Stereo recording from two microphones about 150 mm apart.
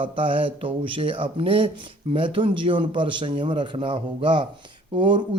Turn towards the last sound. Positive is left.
turn(degrees=-35)  # may be behind; listen again after turning